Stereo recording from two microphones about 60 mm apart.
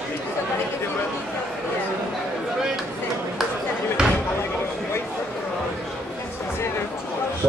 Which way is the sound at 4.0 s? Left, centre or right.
Centre.